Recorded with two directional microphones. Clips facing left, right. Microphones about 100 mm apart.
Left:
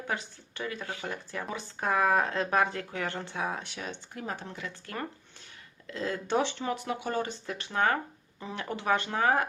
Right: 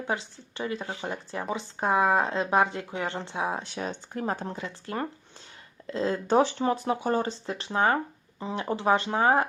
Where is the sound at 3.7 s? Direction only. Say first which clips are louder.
Right 6 dB; 35° right (ahead or behind).